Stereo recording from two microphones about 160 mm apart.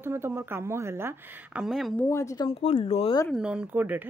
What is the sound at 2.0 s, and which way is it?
Speech, 15° left (ahead or behind).